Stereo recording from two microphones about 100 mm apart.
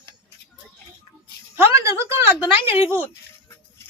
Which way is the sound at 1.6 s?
30° right (ahead or behind).